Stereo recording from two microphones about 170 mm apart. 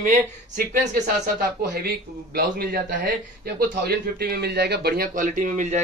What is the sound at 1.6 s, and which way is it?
Speech, 65° right (ahead or behind).